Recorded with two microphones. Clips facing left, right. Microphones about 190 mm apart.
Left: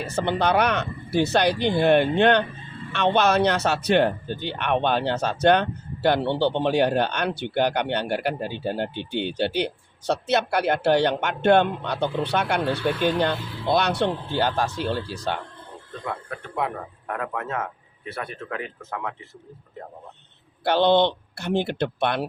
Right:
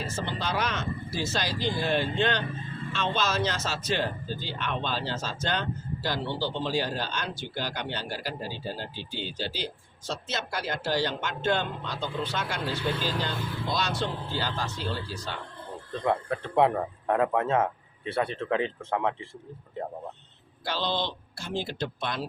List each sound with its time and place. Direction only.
0.0 s speech: 65° left (ahead or behind)
16.0 s a man's voice: 30° right (ahead or behind)
20.7 s speech: 60° left (ahead or behind)